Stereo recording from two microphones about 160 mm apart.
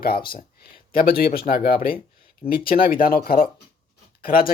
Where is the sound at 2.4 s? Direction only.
65° left (ahead or behind).